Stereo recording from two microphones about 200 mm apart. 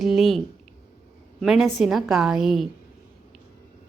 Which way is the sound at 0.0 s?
Centre (ahead or behind).